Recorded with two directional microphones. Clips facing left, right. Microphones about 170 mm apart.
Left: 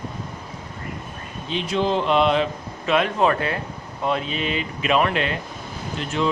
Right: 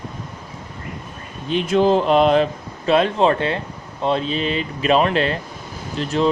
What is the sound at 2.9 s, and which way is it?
A man's voice, 30° right (ahead or behind).